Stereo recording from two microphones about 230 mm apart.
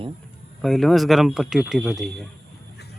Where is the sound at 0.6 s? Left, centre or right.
Centre.